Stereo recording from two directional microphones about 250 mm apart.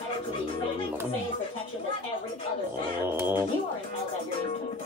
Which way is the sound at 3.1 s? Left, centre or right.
Centre.